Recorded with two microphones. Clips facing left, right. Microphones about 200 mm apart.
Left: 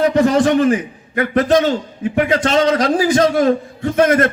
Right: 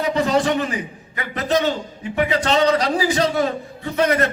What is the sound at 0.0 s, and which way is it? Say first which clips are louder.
A man's voice: left 6 dB; 50° left (ahead or behind).